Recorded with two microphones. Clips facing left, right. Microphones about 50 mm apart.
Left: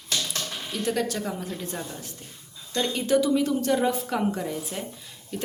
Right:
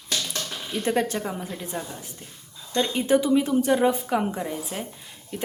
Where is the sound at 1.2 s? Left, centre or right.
Centre.